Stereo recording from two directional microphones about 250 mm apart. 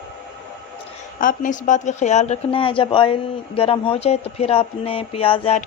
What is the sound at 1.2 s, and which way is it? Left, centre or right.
A woman's voice, left.